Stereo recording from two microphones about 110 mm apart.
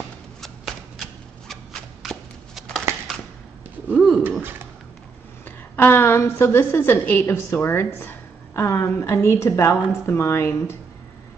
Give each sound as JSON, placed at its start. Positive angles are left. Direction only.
{"t": 0.4, "sound": "shuffling cards", "side_deg": 0}
{"t": 3.9, "sound": "cat", "side_deg": 0}
{"t": 5.8, "sound": "a woman's voice", "side_deg": 20}